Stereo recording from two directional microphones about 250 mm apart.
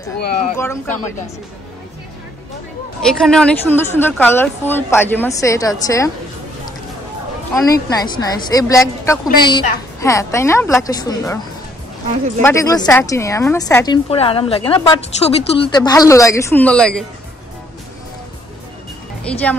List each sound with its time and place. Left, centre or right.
0.6 s speech: centre
3.1 s speech: centre
7.5 s speech: centre
12.4 s speech: centre
14.0 s speech: left; by 17.0 s centre
19.3 s speech: centre